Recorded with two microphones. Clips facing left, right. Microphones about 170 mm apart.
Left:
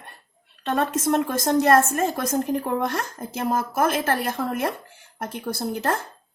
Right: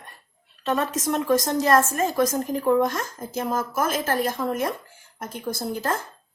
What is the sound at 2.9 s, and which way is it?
Speech, 60° left (ahead or behind).